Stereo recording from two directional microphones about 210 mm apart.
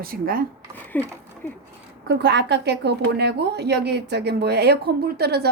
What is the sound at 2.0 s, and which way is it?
A woman's voice, 55° right (ahead or behind).